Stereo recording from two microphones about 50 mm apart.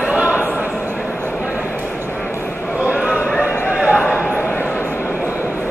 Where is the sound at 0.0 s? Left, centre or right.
Right.